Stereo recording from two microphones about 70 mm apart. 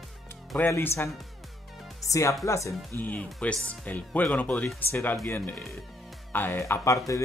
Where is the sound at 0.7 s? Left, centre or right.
Left.